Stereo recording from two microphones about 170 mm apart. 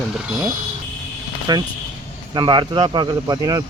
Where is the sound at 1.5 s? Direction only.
20° right (ahead or behind).